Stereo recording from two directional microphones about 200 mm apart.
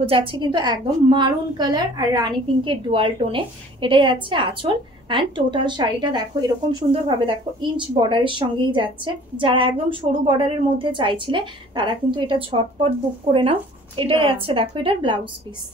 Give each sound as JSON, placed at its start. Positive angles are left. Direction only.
{"t": 0.0, "sound": "a woman's voice", "side_deg": -25}